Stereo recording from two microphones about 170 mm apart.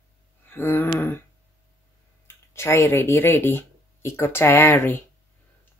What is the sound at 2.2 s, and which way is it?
Speech, 15° left (ahead or behind).